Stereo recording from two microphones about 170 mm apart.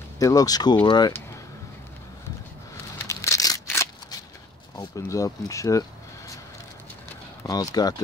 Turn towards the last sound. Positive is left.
turn(degrees=20)  # may be behind; listen again after turning